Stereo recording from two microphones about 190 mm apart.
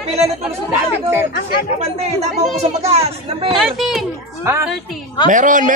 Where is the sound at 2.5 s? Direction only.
35° right (ahead or behind).